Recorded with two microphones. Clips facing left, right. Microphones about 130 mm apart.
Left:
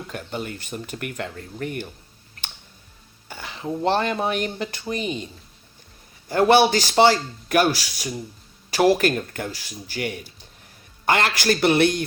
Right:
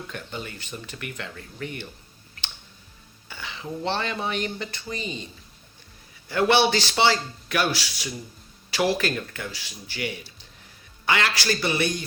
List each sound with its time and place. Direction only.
0.1 s a man's voice: 45° left (ahead or behind)
3.2 s a man's voice: 45° left (ahead or behind)
6.2 s a man's voice: 45° left (ahead or behind); by 12.0 s 65° left (ahead or behind)